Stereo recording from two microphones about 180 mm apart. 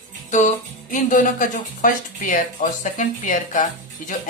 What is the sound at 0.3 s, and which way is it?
Speech, 45° left (ahead or behind).